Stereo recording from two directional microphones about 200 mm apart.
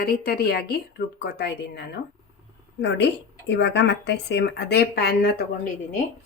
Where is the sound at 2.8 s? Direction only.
60° left (ahead or behind).